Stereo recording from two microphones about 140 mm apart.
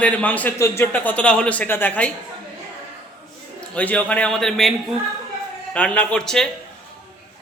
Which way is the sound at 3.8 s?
10° left (ahead or behind).